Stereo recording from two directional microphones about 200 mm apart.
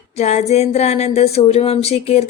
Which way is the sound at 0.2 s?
35° left (ahead or behind).